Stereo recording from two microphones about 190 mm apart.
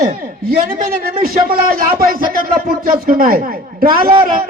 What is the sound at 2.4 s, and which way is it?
A man's voice, 50° right (ahead or behind).